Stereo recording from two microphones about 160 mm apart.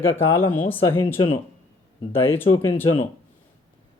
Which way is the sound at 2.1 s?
15° left (ahead or behind).